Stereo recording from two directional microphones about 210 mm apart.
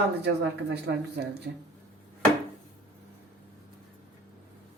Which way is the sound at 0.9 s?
60° right (ahead or behind).